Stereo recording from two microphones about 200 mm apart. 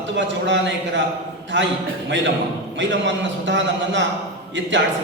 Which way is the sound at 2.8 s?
65° right (ahead or behind).